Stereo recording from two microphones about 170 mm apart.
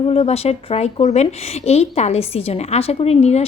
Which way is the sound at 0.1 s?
35° left (ahead or behind).